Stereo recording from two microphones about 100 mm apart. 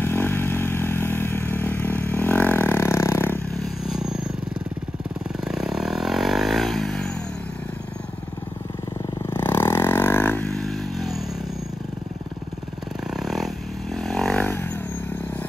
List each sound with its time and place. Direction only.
0.0 s vehicle: 20° left (ahead or behind)
3.5 s vehicle: centre (ahead or behind)
5.4 s vehicle: 5° right (ahead or behind)
9.2 s vehicle: 20° left (ahead or behind)
10.5 s a sound: centre (ahead or behind)
13.1 s a sound: centre (ahead or behind)
13.9 s vehicle: 5° left (ahead or behind)
14.4 s vehicle: 20° left (ahead or behind)